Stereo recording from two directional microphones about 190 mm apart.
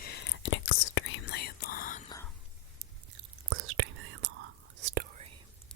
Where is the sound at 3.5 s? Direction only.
90° right.